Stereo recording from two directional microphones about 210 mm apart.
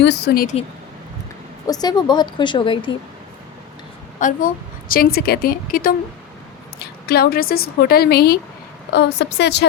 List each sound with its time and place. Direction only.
0.0 s a woman's voice: 50° left (ahead or behind)
1.6 s a woman's voice: 20° left (ahead or behind)
4.2 s a woman's voice: 40° left (ahead or behind)
7.1 s a woman's voice: 45° left (ahead or behind)